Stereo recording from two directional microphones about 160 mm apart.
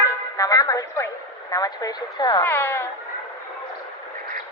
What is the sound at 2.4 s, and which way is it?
Speech, 15° left (ahead or behind).